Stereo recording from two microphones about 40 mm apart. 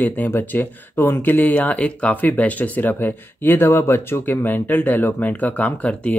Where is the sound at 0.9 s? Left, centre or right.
Left.